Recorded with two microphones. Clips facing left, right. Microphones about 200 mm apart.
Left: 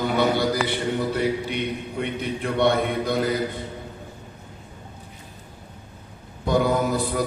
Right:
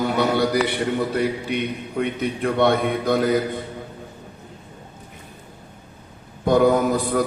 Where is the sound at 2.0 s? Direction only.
50° right (ahead or behind).